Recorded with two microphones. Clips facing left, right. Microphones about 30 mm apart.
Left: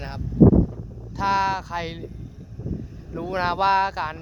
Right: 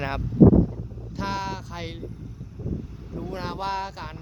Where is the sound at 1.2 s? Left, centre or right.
Centre.